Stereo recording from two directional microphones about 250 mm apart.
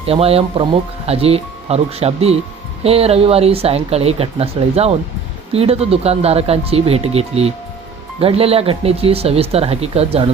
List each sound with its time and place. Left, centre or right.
0.0 s speech: right